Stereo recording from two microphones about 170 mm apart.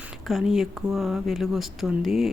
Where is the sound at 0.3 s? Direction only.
Centre (ahead or behind).